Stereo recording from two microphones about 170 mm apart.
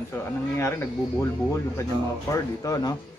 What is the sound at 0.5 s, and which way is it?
Speech, 15° left (ahead or behind).